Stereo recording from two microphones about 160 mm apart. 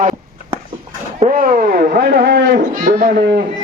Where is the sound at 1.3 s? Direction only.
60° right (ahead or behind); by 3.4 s 80° right.